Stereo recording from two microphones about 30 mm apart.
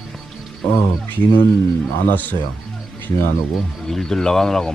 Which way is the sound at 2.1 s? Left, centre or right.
Left.